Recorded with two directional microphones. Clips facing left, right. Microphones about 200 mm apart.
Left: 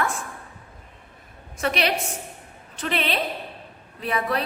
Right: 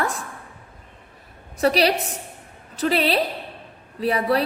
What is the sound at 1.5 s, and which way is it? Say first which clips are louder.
A woman's voice: right 5 dB; 35° right (ahead or behind).